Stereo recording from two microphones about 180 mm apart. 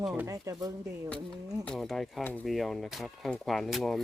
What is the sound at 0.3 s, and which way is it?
Speech, 20° right (ahead or behind).